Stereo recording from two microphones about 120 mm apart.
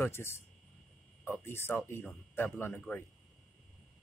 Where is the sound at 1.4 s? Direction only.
20° left (ahead or behind).